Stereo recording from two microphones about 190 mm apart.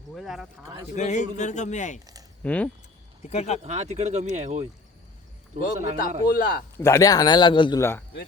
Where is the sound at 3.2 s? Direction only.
35° left (ahead or behind).